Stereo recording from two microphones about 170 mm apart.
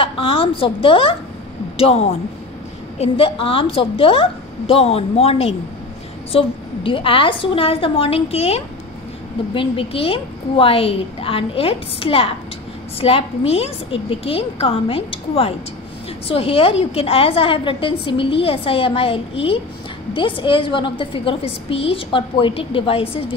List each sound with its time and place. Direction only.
0.0 s a woman's voice: 35° left (ahead or behind)